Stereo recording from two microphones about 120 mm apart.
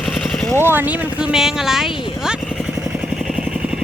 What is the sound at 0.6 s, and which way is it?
Speech, 20° right (ahead or behind).